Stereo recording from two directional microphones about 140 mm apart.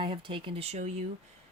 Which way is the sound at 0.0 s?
40° right (ahead or behind).